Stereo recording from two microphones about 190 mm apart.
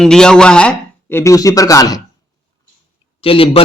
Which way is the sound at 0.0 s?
5° left (ahead or behind).